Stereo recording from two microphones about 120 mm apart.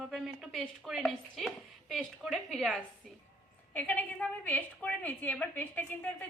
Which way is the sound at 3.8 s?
15° left (ahead or behind).